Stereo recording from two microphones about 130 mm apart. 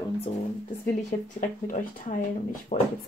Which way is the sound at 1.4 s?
90° left.